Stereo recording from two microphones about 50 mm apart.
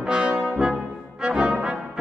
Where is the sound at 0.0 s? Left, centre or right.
Right.